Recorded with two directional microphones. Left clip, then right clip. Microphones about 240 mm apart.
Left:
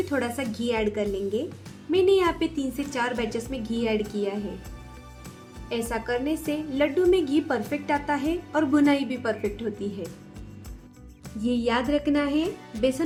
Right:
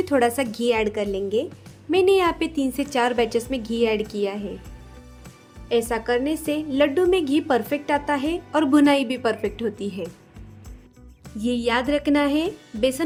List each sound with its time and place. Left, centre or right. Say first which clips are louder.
0.0 s a woman's voice: right 7 dB; right
5.6 s a woman's voice: right 7 dB; right
11.3 s a woman's voice: right 3 dB; right
12.7 s speech: right 3 dB; centre